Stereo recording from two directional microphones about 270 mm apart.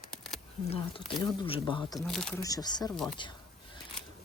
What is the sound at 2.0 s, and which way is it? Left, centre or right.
Speech, centre.